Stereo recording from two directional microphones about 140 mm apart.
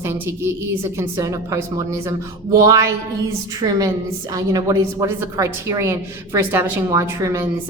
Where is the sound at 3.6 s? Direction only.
45° right (ahead or behind).